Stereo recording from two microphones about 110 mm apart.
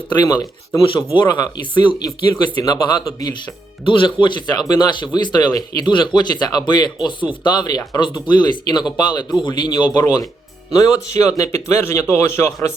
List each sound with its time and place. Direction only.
0.2 s speech: 30° left (ahead or behind)
1.2 s speech: 45° left (ahead or behind)
3.8 s speech: 50° left (ahead or behind)
10.7 s speech: 30° left (ahead or behind)